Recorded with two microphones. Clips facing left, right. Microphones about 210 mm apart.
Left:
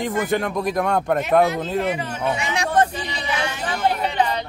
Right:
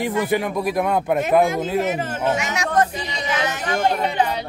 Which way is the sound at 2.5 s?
30° left (ahead or behind).